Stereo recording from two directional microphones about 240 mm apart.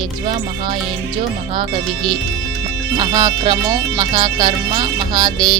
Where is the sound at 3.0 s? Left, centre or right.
Centre.